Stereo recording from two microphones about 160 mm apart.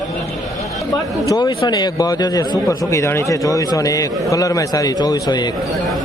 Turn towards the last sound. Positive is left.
turn(degrees=25)  # may be behind; listen again after turning